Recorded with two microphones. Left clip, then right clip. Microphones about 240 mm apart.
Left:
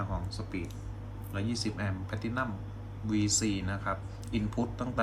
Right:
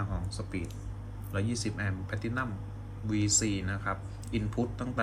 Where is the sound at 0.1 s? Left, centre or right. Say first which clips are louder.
Left 1 dB; centre.